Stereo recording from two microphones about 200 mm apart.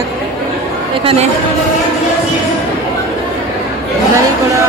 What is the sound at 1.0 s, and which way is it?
Speech, 25° right (ahead or behind).